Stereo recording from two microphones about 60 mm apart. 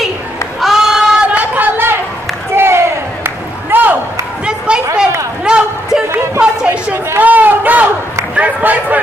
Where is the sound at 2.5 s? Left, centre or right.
Right.